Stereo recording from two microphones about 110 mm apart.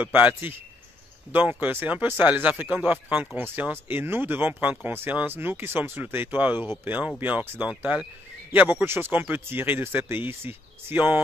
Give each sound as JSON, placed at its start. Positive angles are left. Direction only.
{"t": 0.0, "sound": "speech", "side_deg": -15}